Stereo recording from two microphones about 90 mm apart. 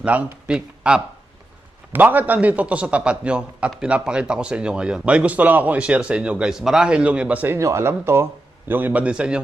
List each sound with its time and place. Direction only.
0.1 s speech: 15° right (ahead or behind)
1.9 s speech: 20° right (ahead or behind)
7.4 s a man's voice: 30° right (ahead or behind); by 9.4 s 10° right (ahead or behind)